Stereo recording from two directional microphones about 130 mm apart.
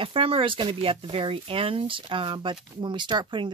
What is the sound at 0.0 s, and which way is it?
Speech, 45° right (ahead or behind).